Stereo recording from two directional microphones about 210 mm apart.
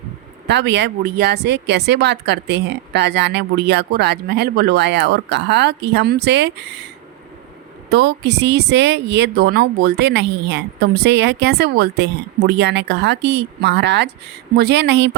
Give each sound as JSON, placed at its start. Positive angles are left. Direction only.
{"t": 0.4, "sound": "speech", "side_deg": -55}